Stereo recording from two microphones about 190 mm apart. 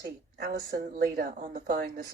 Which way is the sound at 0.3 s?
50° right (ahead or behind).